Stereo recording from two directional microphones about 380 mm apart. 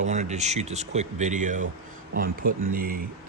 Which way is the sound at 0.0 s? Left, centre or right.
Centre.